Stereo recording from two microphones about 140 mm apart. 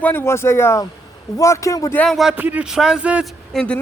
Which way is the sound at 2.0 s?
Centre (ahead or behind).